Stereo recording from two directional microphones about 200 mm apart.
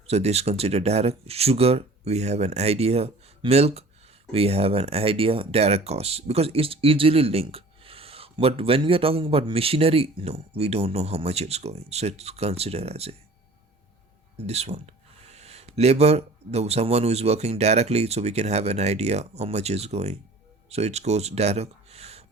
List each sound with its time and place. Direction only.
0.1 s speech: 30° right (ahead or behind)
14.3 s speech: 30° right (ahead or behind)